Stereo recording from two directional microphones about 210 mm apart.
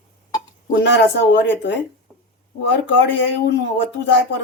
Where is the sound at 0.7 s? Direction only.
55° left (ahead or behind).